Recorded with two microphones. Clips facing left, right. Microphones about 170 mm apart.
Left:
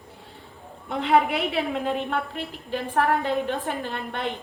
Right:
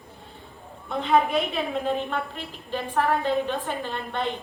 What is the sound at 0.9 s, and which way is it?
Speech, 75° left (ahead or behind).